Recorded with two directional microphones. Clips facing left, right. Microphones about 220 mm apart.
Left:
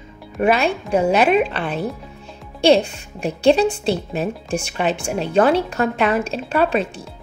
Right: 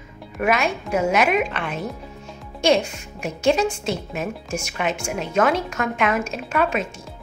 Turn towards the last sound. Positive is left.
turn(degrees=35)  # may be behind; listen again after turning